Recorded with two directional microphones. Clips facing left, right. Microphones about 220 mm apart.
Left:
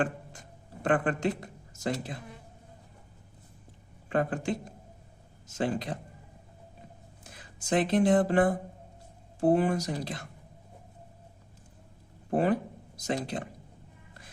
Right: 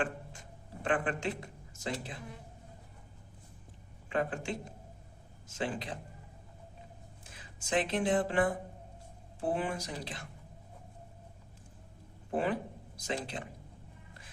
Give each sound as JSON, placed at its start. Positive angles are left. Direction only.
{"t": 0.8, "sound": "a man's voice", "side_deg": 40}
{"t": 4.1, "sound": "a man's voice", "side_deg": 50}
{"t": 5.5, "sound": "a man's voice", "side_deg": 40}
{"t": 7.7, "sound": "speech", "side_deg": 40}
{"t": 12.3, "sound": "a man's voice", "side_deg": 45}